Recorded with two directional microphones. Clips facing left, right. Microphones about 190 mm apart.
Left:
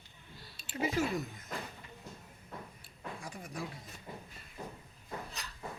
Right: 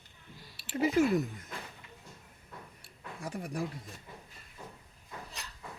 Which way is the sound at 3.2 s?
60° right (ahead or behind).